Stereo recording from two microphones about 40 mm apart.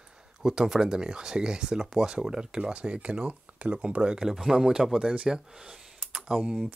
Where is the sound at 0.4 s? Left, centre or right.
Centre.